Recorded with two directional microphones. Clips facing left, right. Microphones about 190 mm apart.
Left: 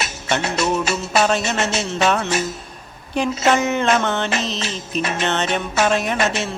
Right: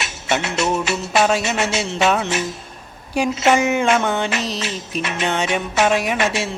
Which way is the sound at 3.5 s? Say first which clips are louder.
Right 1 dB; 15° right (ahead or behind).